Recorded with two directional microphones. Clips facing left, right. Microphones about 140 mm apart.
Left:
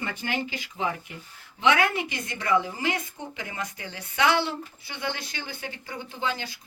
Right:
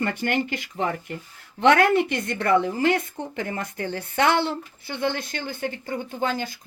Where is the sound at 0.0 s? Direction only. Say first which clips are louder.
Right 6 dB; 65° right (ahead or behind).